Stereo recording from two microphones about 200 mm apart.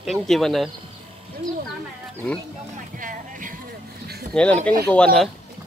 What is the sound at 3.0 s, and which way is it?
Music, 40° right (ahead or behind).